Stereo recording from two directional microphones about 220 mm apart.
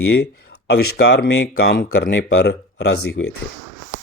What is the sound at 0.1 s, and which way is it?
Speech, 50° left (ahead or behind).